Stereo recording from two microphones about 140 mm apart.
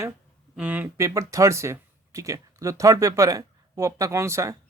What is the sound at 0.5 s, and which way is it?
Speech, 10° right (ahead or behind).